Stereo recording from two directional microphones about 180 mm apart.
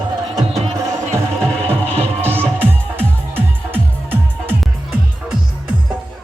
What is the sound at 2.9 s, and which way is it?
Music, 10° right (ahead or behind).